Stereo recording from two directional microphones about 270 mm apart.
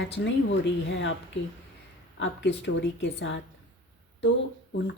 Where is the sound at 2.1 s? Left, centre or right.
Left.